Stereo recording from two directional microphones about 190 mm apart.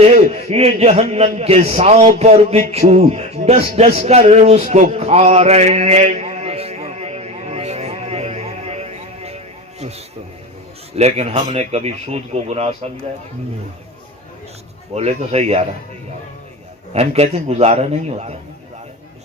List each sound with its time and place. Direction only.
0.0 s a man's voice: 35° right (ahead or behind)
10.9 s a man's voice: 35° right (ahead or behind)
14.9 s a man's voice: 35° right (ahead or behind)
16.9 s a man's voice: 35° right (ahead or behind)